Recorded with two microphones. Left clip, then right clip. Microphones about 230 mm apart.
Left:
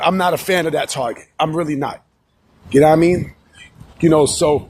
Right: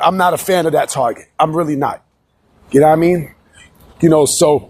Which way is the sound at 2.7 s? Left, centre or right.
Centre.